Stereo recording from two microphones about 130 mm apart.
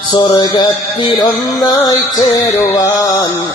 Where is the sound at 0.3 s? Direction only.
35° left (ahead or behind).